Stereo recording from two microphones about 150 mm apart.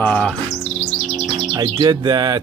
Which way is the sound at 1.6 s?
30° right (ahead or behind).